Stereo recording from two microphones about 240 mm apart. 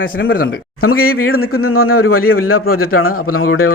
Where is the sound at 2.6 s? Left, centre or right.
Left.